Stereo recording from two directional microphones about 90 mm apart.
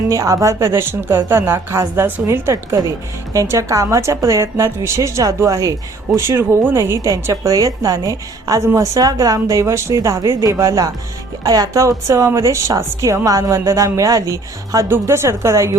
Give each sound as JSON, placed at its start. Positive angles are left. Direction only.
{"t": 0.1, "sound": "a woman's voice", "side_deg": -35}
{"t": 14.8, "sound": "speech", "side_deg": -25}